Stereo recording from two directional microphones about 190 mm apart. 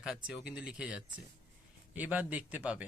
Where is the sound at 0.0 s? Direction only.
5° right (ahead or behind).